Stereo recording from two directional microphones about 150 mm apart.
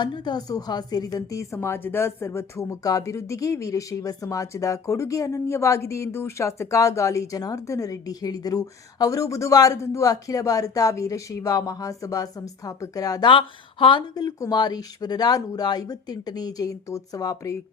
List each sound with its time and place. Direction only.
0.0 s speech: 30° left (ahead or behind)